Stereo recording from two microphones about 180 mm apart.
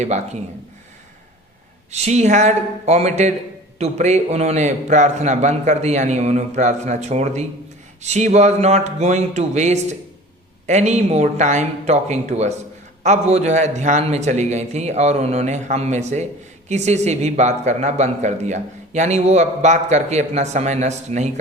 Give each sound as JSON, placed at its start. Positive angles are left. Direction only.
{"t": 1.9, "sound": "speech", "side_deg": -40}